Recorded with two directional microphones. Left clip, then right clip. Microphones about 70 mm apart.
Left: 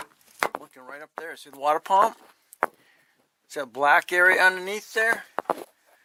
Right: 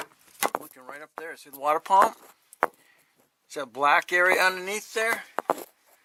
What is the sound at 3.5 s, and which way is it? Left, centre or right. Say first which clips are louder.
Speech: left 2 dB; left.